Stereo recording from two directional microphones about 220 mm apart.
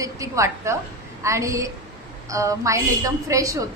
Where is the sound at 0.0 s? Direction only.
15° right (ahead or behind).